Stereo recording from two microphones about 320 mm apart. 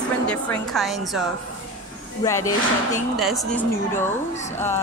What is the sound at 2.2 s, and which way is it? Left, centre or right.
A woman's voice, centre.